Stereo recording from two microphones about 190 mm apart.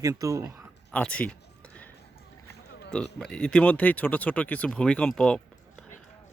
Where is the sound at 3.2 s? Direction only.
5° left (ahead or behind).